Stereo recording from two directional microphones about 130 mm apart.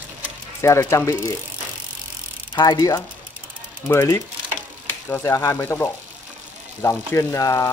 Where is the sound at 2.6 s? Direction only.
30° left (ahead or behind).